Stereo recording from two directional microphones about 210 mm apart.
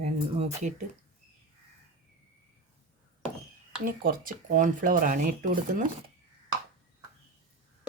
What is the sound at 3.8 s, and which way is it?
Speech, 45° right (ahead or behind).